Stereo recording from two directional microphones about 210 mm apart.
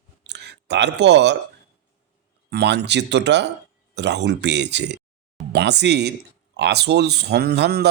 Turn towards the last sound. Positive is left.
turn(degrees=-50)  # may be behind; listen again after turning